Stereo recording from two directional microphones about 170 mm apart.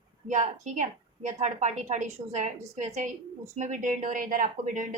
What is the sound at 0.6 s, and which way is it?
Speech, 45° right (ahead or behind).